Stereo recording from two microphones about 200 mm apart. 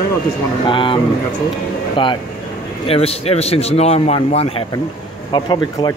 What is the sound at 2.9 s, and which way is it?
Speech, 30° left (ahead or behind).